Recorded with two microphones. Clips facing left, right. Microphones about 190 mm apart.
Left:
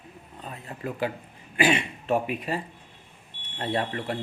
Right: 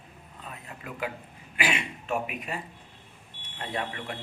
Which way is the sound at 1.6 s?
30° left (ahead or behind).